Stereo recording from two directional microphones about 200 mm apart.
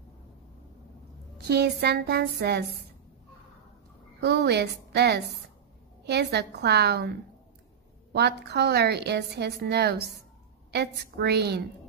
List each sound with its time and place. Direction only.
1.5 s a sound: 55° right (ahead or behind)
4.2 s a woman's voice: 55° right (ahead or behind)
8.1 s a woman's voice: 55° right (ahead or behind)